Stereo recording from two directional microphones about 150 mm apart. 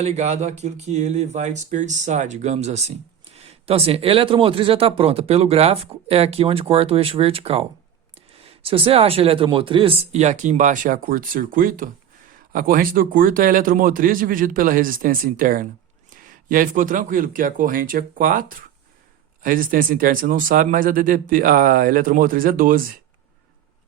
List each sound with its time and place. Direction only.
0.0 s speech: 45° right (ahead or behind); by 23.0 s 70° right (ahead or behind)